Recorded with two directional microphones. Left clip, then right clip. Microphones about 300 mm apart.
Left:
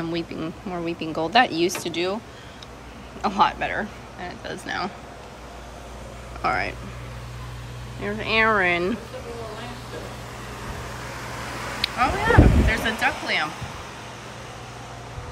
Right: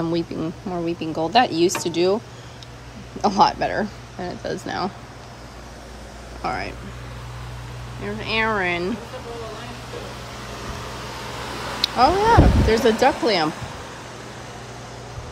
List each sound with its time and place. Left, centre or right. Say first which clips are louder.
0.1 s speech: right 4 dB; centre
3.2 s speech: right 3 dB; centre
6.4 s speech: left 3 dB; centre
8.0 s speech: left 2 dB; centre
11.6 s speech: right 6 dB; centre